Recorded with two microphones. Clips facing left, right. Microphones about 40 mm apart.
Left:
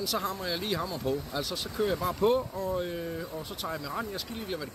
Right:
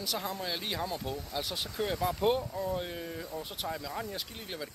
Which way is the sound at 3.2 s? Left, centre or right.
Centre.